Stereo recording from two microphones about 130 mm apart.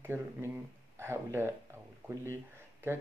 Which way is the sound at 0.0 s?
20° right (ahead or behind).